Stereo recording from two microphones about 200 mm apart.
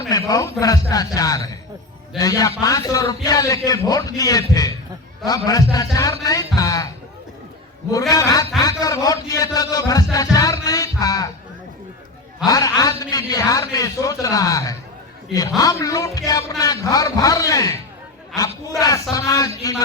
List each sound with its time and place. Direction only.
0.1 s a man's voice: 15° left (ahead or behind)
7.9 s a man's voice: 15° left (ahead or behind)
10.3 s music: 15° left (ahead or behind)
12.5 s a man's voice: 15° left (ahead or behind)